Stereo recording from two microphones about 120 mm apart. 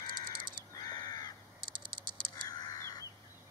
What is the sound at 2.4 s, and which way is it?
Crow, 35° left (ahead or behind).